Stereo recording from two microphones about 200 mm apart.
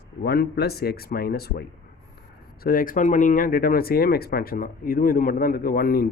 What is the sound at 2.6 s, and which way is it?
Speech, 45° left (ahead or behind).